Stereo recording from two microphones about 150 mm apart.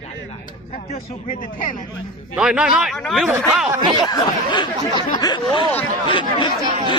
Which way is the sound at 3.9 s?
30° left (ahead or behind).